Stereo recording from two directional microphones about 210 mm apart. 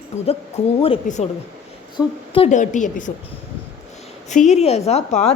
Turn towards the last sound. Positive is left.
turn(degrees=30)  # may be behind; listen again after turning